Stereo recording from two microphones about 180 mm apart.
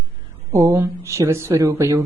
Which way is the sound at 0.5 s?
15° right (ahead or behind).